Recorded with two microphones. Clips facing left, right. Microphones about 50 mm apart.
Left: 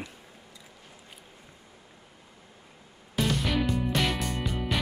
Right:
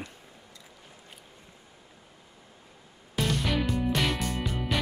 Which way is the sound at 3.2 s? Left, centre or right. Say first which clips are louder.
Left 1 dB; centre.